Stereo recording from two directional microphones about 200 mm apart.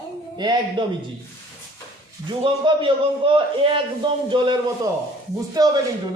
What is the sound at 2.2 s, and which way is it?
A man's voice, 25° right (ahead or behind).